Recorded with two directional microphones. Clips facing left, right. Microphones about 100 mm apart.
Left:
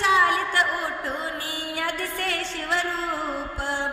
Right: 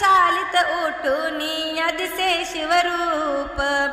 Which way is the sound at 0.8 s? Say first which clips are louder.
Right 8 dB; 65° right (ahead or behind).